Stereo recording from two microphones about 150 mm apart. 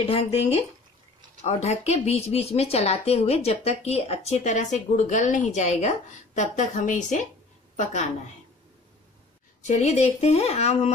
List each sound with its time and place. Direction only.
0.1 s a woman's voice: 45° left (ahead or behind)
9.6 s speech: 50° left (ahead or behind)